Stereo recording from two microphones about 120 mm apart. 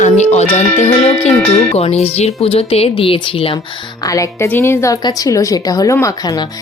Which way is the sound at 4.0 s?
30° left (ahead or behind).